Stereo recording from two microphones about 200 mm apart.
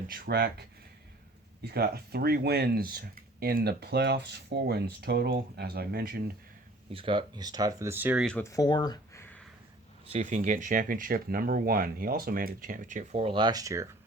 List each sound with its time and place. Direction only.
0.1 s speech: 50° right (ahead or behind)
1.6 s speech: 50° right (ahead or behind)
6.9 s speech: 25° right (ahead or behind); by 8.3 s 5° right (ahead or behind)
8.3 s speech: 10° left (ahead or behind)
10.1 s speech: 35° right (ahead or behind); by 13.8 s 15° right (ahead or behind)